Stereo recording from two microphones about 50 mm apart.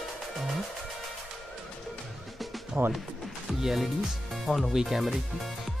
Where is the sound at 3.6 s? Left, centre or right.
Centre.